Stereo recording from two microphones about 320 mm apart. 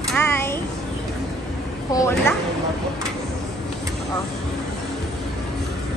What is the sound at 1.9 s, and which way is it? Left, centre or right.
Speech, centre.